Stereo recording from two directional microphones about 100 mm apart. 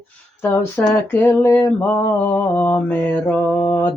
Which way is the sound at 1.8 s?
20° left (ahead or behind).